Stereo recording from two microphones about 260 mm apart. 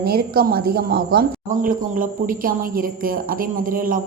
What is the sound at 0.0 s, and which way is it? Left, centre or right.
Speech, right.